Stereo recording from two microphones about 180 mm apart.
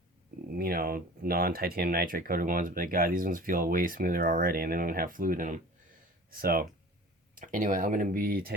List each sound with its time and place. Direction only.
0.5 s speech: 55° right (ahead or behind)